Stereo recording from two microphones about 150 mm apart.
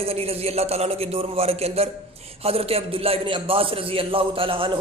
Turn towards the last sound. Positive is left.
turn(degrees=-35)  # may be behind; listen again after turning